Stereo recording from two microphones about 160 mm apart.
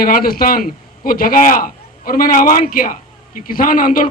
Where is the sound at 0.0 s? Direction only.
65° left (ahead or behind).